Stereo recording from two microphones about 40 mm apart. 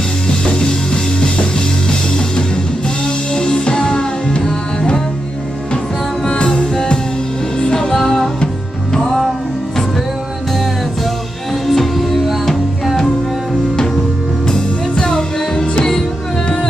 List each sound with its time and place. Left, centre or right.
2.1 s music: left
6.2 s music: centre
11.6 s music: centre
14.5 s music: centre